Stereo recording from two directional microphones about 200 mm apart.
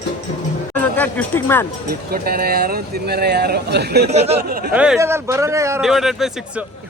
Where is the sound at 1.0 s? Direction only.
10° left (ahead or behind).